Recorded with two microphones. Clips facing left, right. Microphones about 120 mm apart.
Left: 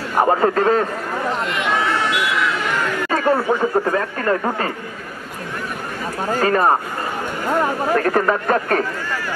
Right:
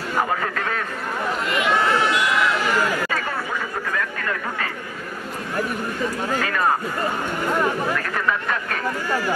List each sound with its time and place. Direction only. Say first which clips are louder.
0.2 s speech: left 10 dB; 35° left (ahead or behind)
1.5 s run: right 4 dB; centre (ahead or behind)
3.1 s chatter: left 9 dB; 35° left (ahead or behind)
3.8 s speech: left 7 dB; 35° left (ahead or behind)
6.3 s speech: left 7 dB; 40° left (ahead or behind)
7.9 s speech: left 7 dB; 40° left (ahead or behind)